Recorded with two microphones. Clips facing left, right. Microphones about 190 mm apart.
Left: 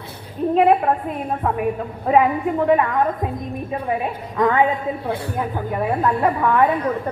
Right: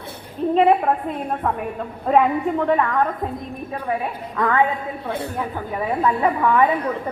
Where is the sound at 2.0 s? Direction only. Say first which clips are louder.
Left 1 dB; 10° left (ahead or behind).